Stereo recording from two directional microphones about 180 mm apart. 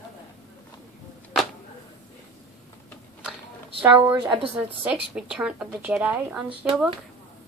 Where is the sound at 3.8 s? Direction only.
10° right (ahead or behind).